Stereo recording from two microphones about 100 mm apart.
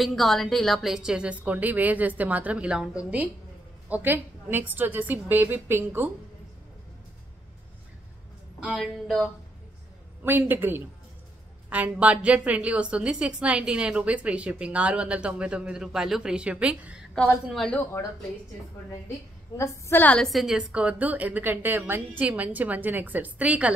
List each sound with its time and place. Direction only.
0.0 s a woman's voice: centre (ahead or behind); by 6.0 s 20° right (ahead or behind)
8.5 s a woman's voice: 10° right (ahead or behind)
8.8 s speech: centre (ahead or behind)
10.2 s a woman's voice: 20° right (ahead or behind)
17.5 s speech: 5° left (ahead or behind)
19.5 s a woman's voice: 25° left (ahead or behind)
20.0 s a woman's voice: 15° left (ahead or behind)
20.2 s a woman's voice: 5° right (ahead or behind)